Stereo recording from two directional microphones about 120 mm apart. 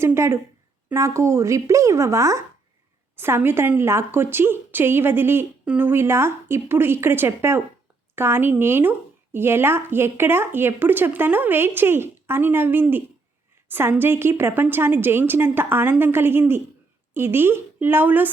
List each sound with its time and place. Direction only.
0.0 s a woman's voice: 20° right (ahead or behind)